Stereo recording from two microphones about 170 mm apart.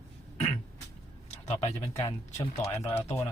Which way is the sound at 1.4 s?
40° left (ahead or behind).